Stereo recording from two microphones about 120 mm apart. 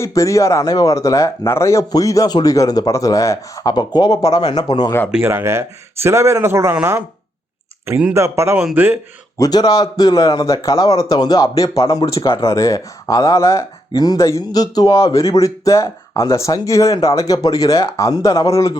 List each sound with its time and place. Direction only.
0.0 s speech: 25° left (ahead or behind)
5.2 s speech: 20° right (ahead or behind)
7.9 s a man's voice: 15° right (ahead or behind)
9.4 s a man's voice: 35° left (ahead or behind)